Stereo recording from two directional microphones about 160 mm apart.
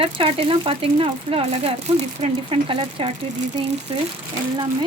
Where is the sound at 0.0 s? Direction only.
35° right (ahead or behind).